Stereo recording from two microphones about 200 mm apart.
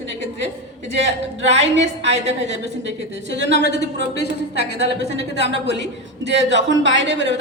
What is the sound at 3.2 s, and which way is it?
Speech, 65° right (ahead or behind).